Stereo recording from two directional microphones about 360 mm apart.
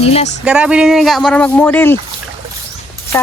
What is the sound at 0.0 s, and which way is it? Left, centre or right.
Music, centre.